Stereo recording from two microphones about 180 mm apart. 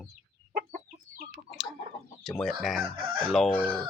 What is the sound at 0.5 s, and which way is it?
Chicken, 55° right (ahead or behind).